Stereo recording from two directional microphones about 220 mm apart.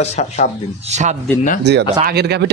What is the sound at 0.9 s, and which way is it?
Speech, 30° right (ahead or behind).